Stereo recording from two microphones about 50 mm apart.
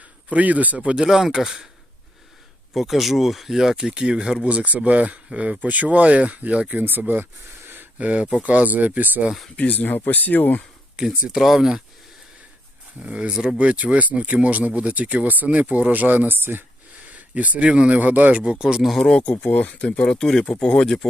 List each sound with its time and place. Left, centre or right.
0.3 s speech: right
0.8 s speech: right
1.0 s speech: centre
2.7 s speech: centre
4.4 s speech: right
7.6 s a sound: right
7.9 s speech: right
9.6 s speech: left
11.3 s speech: centre
13.0 s speech: centre; by 16.6 s right
17.3 s speech: right; by 18.9 s centre
18.9 s speech: centre
19.1 s speech: left
20.1 s speech: centre